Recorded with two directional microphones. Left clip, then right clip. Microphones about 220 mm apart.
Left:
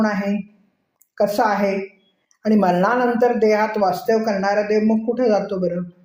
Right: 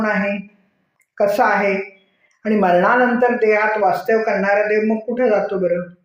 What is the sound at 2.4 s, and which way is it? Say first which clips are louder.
Speech: right 3 dB; 50° left (ahead or behind).